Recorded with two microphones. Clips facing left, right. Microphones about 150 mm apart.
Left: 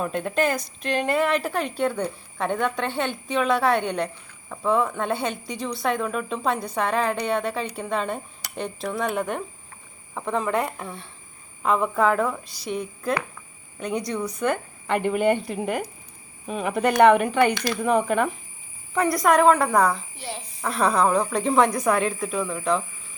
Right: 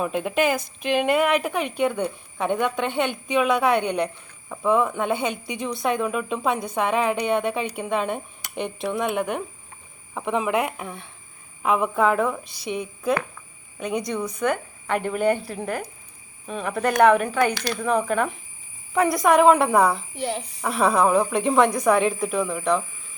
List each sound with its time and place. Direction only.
0.0 s a woman's voice: 5° right (ahead or behind)
9.0 s a woman's voice: centre (ahead or behind)
19.4 s a woman's voice: 20° right (ahead or behind)